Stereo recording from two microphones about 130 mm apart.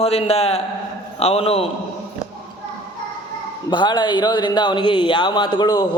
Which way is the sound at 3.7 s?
35° left (ahead or behind).